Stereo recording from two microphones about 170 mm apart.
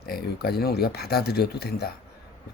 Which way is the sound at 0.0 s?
65° left (ahead or behind).